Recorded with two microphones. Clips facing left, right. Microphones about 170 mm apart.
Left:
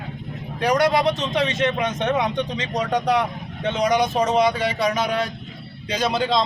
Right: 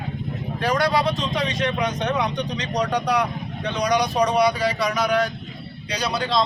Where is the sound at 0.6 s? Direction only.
20° left (ahead or behind).